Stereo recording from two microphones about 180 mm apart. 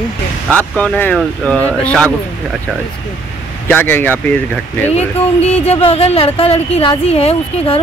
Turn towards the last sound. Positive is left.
turn(degrees=35)  # may be behind; listen again after turning